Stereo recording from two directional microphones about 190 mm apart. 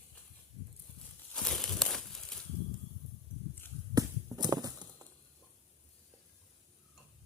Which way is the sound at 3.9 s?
20° right (ahead or behind).